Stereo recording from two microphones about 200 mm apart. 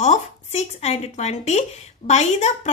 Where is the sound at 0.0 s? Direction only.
35° left (ahead or behind).